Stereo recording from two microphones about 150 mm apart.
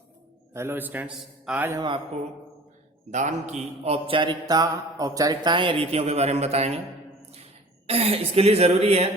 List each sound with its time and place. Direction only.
0.5 s a man's voice: 15° right (ahead or behind)
3.1 s speech: 50° right (ahead or behind)
7.9 s a woman's voice: 40° right (ahead or behind)